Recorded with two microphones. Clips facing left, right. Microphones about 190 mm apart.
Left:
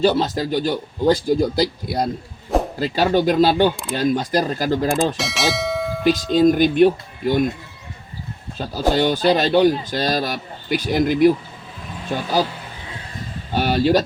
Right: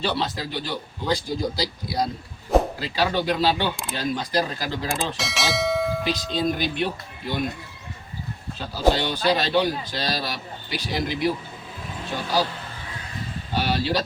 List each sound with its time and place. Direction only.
0.0 s speech: 45° left (ahead or behind)
5.1 s bell: centre (ahead or behind)
6.1 s speech: 50° left (ahead or behind)
8.5 s speech: 45° left (ahead or behind)
13.5 s speech: 50° left (ahead or behind)